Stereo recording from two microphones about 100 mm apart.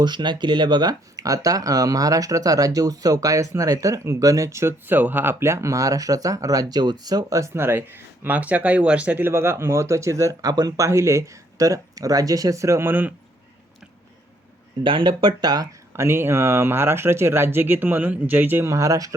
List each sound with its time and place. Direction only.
0.0 s speech: 50° right (ahead or behind); by 13.1 s 20° right (ahead or behind)
14.8 s speech: 60° right (ahead or behind)
15.9 s speech: 25° right (ahead or behind)